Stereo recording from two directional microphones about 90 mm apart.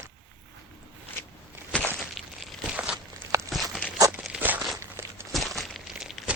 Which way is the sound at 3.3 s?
35° right (ahead or behind).